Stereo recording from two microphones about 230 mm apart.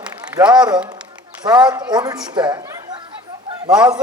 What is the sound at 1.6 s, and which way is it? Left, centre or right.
Speech, centre.